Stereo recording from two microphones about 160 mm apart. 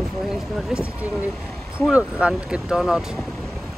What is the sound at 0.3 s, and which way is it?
Speech, centre (ahead or behind).